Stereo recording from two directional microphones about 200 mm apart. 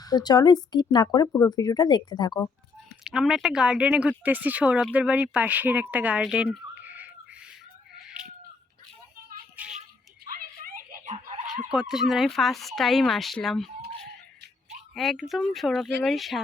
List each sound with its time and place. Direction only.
0.0 s speech: 20° left (ahead or behind)
3.0 s speech: 5° right (ahead or behind)
7.9 s cat: 5° right (ahead or behind)
10.2 s a sound: 45° right (ahead or behind)
11.7 s speech: 5° right (ahead or behind)
14.9 s speech: centre (ahead or behind)